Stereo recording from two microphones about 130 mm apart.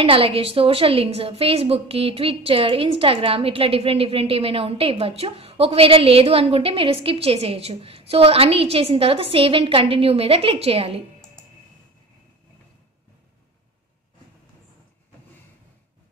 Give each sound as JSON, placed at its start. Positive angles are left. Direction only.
{"t": 0.0, "sound": "a woman's voice", "side_deg": -45}